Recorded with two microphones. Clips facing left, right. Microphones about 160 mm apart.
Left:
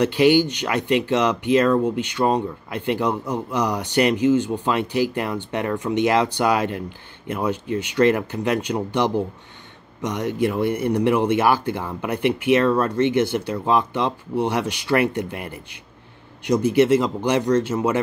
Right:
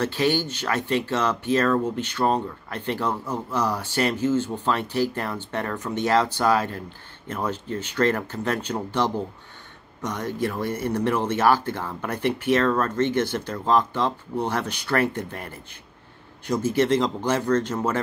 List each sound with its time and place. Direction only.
0.0 s speech: 15° left (ahead or behind)